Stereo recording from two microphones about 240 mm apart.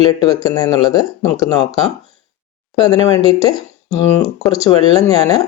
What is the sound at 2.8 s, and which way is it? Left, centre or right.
Speech, centre.